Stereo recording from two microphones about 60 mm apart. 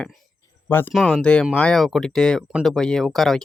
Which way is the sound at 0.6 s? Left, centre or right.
Left.